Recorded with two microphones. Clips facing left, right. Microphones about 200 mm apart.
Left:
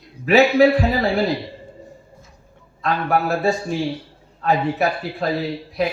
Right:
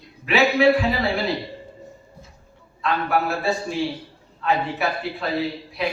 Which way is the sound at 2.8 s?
40° left (ahead or behind).